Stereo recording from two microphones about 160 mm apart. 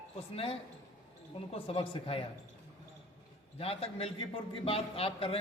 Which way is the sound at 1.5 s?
35° left (ahead or behind).